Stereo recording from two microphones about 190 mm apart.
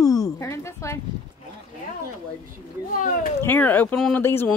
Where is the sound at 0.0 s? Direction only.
20° left (ahead or behind).